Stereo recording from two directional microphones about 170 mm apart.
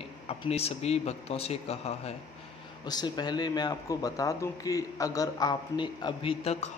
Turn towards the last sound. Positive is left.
turn(degrees=35)  # may be behind; listen again after turning